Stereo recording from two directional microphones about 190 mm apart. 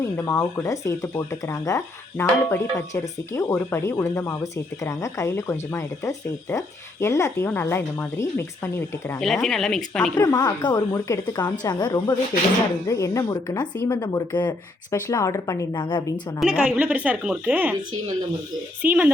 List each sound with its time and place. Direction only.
0.0 s speech: 15° left (ahead or behind)
10.2 s a woman's voice: 20° left (ahead or behind)
16.4 s a woman's voice: 5° right (ahead or behind)
18.8 s a woman's voice: 10° right (ahead or behind)